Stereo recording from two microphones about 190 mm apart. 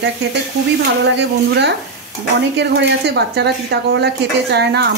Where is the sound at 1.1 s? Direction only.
65° right (ahead or behind).